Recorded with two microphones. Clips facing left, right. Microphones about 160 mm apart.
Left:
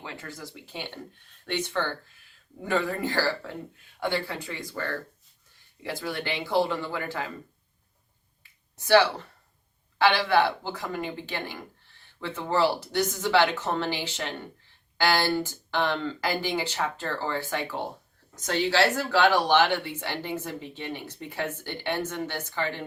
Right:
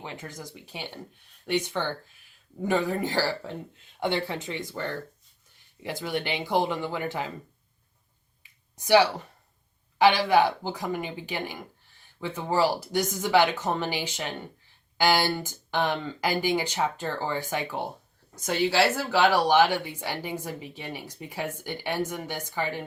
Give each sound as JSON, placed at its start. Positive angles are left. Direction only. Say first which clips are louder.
{"t": 0.0, "sound": "speech", "louder": "right 1 dB", "side_deg": -20}
{"t": 8.7, "sound": "speech", "louder": "even", "side_deg": -15}